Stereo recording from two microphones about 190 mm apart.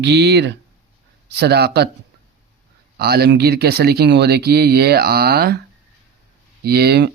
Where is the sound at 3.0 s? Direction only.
55° right (ahead or behind).